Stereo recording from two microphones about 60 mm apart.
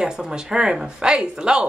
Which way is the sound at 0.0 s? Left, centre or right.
Centre.